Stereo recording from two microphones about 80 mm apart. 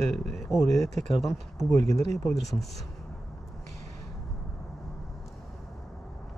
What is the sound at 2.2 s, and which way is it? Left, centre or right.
Speech, centre.